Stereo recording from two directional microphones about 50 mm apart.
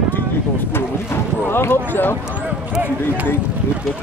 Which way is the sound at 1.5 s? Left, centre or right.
Left.